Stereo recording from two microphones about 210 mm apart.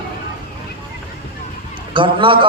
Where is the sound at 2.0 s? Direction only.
25° right (ahead or behind).